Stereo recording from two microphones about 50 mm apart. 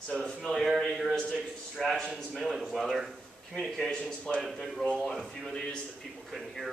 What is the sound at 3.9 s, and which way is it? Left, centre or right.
Speech, left.